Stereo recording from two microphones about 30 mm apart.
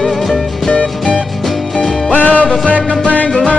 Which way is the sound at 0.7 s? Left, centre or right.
Left.